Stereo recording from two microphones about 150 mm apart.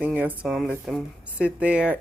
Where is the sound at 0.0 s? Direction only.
10° right (ahead or behind).